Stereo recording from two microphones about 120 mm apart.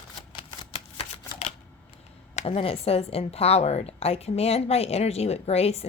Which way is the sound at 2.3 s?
55° left (ahead or behind).